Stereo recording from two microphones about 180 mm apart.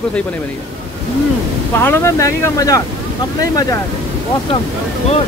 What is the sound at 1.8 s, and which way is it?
Speech, 15° left (ahead or behind).